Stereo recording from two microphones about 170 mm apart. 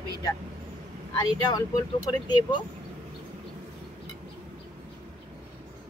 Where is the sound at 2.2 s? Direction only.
25° left (ahead or behind).